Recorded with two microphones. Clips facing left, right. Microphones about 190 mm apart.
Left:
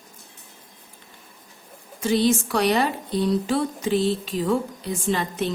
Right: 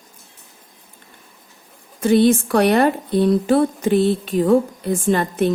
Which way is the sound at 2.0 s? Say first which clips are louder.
Right 6 dB; 55° right (ahead or behind).